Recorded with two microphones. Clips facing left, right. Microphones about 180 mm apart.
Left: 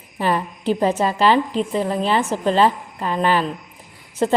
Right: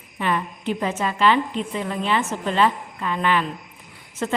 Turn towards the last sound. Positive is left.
turn(degrees=35)  # may be behind; listen again after turning